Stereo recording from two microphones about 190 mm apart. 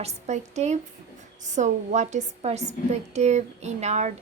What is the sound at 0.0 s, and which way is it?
A woman's voice, 35° right (ahead or behind).